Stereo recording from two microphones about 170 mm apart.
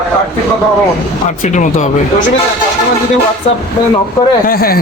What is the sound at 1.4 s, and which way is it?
Speech, 45° left (ahead or behind).